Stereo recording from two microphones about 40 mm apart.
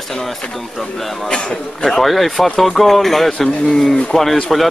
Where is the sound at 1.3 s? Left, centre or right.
Centre.